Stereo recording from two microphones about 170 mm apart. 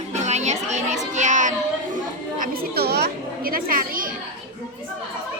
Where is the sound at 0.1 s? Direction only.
40° right (ahead or behind).